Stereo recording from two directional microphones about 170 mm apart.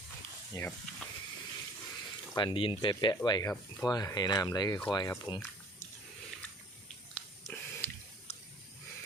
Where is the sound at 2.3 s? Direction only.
30° left (ahead or behind).